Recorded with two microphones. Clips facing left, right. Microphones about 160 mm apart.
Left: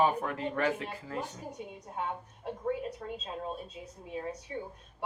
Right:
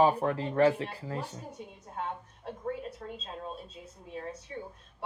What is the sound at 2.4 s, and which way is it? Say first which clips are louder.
A woman's voice: left 3 dB; 15° left (ahead or behind).